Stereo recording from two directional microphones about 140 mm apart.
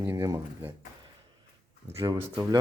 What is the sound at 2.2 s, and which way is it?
Speech, 15° right (ahead or behind).